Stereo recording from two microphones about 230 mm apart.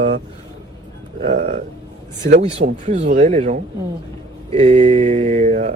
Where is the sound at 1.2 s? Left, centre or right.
Right.